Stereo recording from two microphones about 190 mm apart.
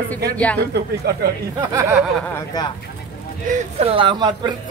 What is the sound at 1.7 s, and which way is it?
Speech, 10° right (ahead or behind).